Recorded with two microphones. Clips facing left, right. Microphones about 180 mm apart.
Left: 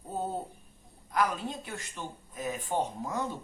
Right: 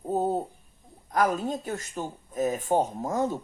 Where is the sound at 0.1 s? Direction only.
45° right (ahead or behind).